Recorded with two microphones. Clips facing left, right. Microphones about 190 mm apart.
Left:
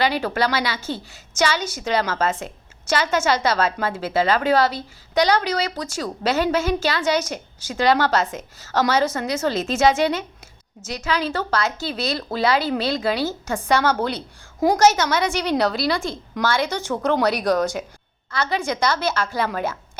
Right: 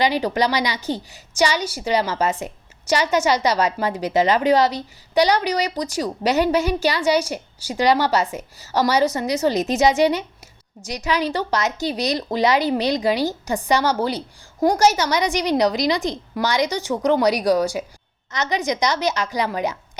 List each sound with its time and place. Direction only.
0.0 s a woman's voice: 15° right (ahead or behind)